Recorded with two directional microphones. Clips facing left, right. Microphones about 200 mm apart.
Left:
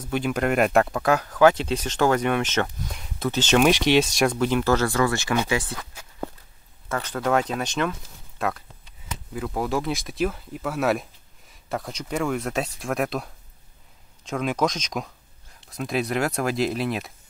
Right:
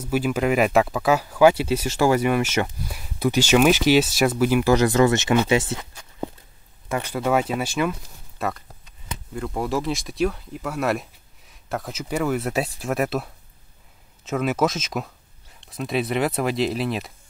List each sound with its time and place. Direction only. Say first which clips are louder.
0.0 s speech: right 2 dB; 5° right (ahead or behind); by 5.9 s 25° right (ahead or behind)
6.9 s speech: right 1 dB; 10° right (ahead or behind)